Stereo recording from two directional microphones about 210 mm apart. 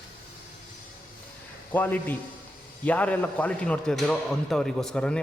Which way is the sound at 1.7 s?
10° left (ahead or behind).